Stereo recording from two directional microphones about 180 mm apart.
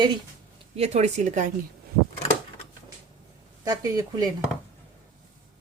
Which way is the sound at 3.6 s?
20° right (ahead or behind).